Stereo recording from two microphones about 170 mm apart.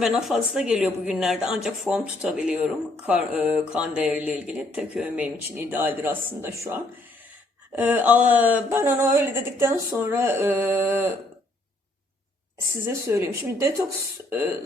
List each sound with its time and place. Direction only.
0.0 s speech: 5° right (ahead or behind)
12.8 s speech: 15° right (ahead or behind)